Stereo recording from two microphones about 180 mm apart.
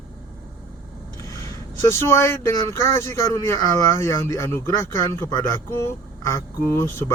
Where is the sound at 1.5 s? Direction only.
15° left (ahead or behind).